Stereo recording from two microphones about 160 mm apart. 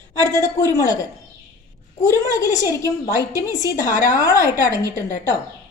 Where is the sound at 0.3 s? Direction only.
20° left (ahead or behind).